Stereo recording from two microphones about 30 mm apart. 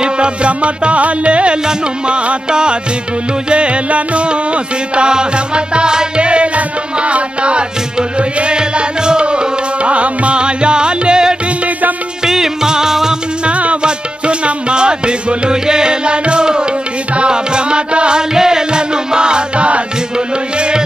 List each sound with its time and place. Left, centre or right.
0.0 s music: right
3.4 s music: right
8.5 s music: right
13.5 s music: right
13.8 s music: right
18.3 s music: right